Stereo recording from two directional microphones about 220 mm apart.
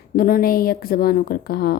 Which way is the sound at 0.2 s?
40° left (ahead or behind).